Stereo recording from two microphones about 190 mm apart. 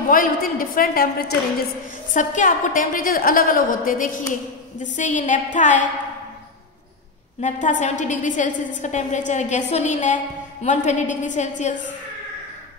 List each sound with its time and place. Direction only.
0.1 s a woman's voice: 45° left (ahead or behind)
7.4 s a woman's voice: 40° left (ahead or behind)